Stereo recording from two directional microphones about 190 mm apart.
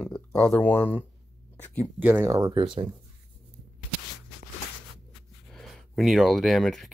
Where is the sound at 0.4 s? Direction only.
5° left (ahead or behind).